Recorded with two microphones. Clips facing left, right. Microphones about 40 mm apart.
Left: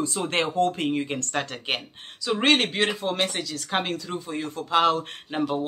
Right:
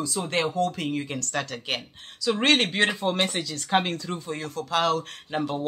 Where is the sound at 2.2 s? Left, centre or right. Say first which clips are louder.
Even; centre.